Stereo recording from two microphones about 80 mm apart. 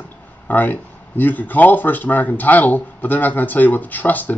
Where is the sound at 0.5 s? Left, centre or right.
Left.